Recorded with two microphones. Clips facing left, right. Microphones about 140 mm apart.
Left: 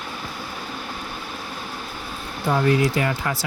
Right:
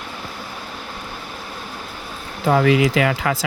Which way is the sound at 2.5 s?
80° right.